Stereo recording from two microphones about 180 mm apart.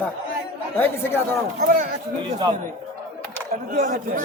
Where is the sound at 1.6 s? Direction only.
50° right (ahead or behind).